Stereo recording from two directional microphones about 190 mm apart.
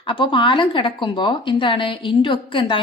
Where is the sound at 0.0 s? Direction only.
25° left (ahead or behind).